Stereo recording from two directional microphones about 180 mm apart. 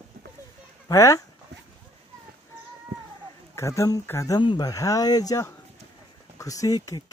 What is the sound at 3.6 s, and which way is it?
Speech, 15° left (ahead or behind).